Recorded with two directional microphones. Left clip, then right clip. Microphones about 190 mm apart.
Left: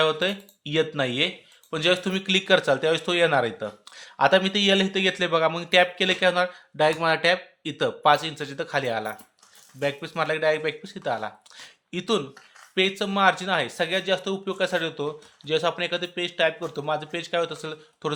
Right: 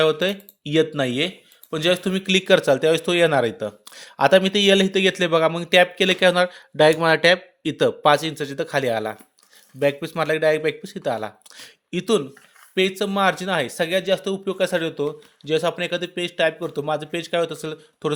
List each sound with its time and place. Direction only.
0.0 s speech: 45° right (ahead or behind)